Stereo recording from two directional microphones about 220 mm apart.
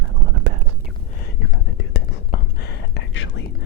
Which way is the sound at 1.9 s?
50° left (ahead or behind).